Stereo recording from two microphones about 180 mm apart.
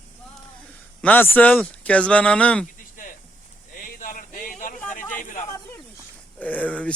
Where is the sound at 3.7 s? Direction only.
50° left (ahead or behind).